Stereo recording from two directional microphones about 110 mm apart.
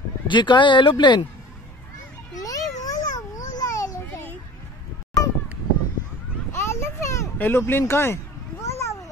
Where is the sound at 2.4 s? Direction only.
35° left (ahead or behind).